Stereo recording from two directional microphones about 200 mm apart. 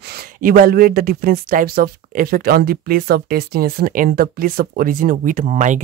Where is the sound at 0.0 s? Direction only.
50° right (ahead or behind).